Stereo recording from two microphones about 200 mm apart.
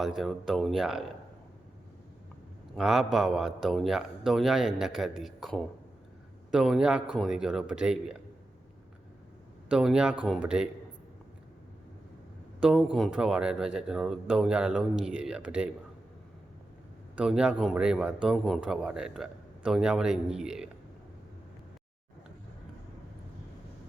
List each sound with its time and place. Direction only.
0.2 s a man's voice: centre (ahead or behind)
2.7 s a man's voice: centre (ahead or behind)
9.6 s a man's voice: 5° right (ahead or behind)
12.6 s a man's voice: 5° right (ahead or behind)
17.2 s a man's voice: 5° right (ahead or behind)